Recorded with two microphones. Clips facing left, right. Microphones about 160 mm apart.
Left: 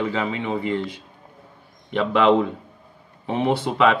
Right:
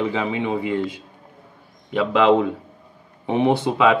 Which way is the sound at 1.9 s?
5° right (ahead or behind).